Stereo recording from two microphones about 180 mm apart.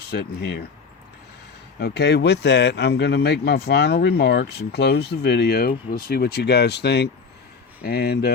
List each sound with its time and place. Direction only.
0.1 s speech: 65° left (ahead or behind)
1.8 s speech: 65° left (ahead or behind)